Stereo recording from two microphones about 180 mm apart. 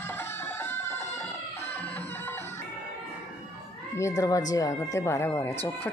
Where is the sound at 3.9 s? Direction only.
15° left (ahead or behind).